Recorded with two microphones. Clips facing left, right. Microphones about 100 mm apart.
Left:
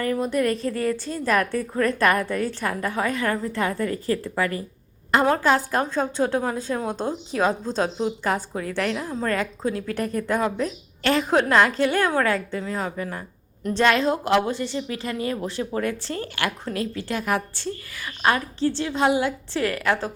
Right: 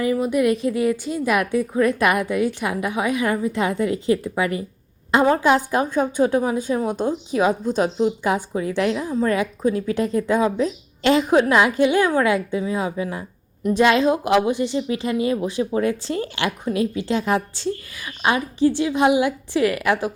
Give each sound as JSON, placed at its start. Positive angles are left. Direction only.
{"t": 0.0, "sound": "a woman's voice", "side_deg": -5}
{"t": 9.8, "sound": "speech", "side_deg": 60}
{"t": 10.2, "sound": "a woman's voice", "side_deg": -15}